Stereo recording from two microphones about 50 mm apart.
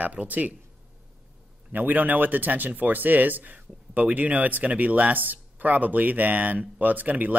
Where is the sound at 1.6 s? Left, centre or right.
Right.